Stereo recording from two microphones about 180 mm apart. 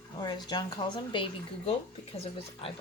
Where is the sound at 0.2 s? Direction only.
25° left (ahead or behind).